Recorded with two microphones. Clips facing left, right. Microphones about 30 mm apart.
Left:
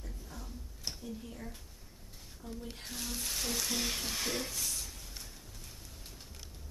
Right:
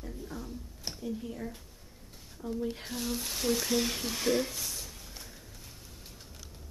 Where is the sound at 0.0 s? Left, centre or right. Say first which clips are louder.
Right 8 dB; right.